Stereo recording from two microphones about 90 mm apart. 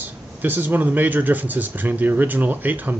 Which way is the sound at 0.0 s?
20° right (ahead or behind).